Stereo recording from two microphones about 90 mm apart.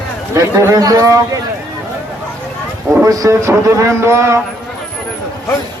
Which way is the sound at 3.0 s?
40° right (ahead or behind).